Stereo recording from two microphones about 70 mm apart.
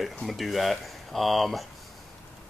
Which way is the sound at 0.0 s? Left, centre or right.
Centre.